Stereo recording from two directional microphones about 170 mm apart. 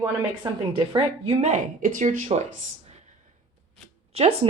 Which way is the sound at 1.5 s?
50° right (ahead or behind).